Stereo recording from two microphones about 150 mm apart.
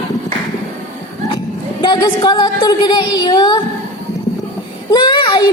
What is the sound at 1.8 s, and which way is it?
A woman's voice, 30° left (ahead or behind).